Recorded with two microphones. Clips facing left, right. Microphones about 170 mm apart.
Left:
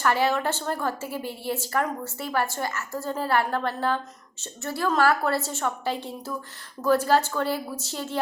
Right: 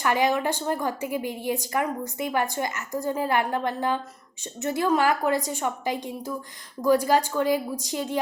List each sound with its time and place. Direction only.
0.0 s a woman's voice: 15° right (ahead or behind)